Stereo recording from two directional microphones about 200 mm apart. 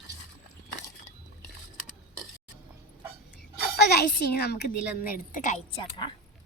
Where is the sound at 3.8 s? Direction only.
55° left (ahead or behind).